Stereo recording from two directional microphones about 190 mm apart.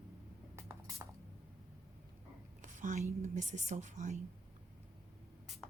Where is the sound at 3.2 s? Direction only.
40° right (ahead or behind).